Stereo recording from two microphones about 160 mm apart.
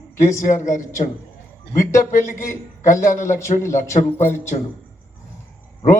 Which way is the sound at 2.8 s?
50° left (ahead or behind).